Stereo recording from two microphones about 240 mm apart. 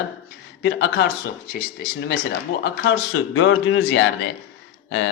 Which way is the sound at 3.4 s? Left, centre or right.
Left.